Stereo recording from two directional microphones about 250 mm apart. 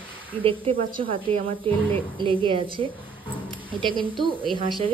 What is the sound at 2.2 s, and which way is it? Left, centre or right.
A woman's voice, right.